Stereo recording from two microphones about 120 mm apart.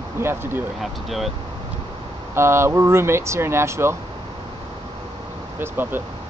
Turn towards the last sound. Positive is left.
turn(degrees=-15)  # may be behind; listen again after turning